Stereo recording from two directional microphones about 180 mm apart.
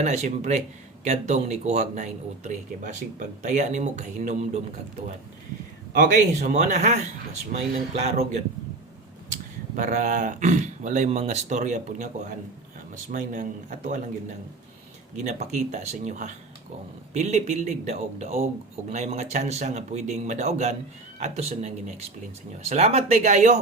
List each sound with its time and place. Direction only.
0.0 s speech: 40° right (ahead or behind)
6.4 s speech: 40° right (ahead or behind)
15.2 s speech: 40° right (ahead or behind)